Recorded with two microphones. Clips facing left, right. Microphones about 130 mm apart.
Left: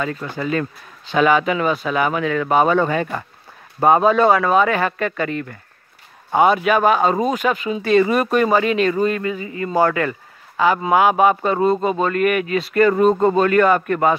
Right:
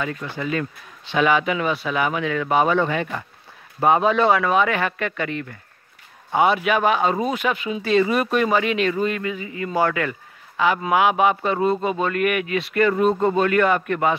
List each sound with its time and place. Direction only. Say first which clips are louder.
0.0 s speech: left 3 dB; 45° left (ahead or behind)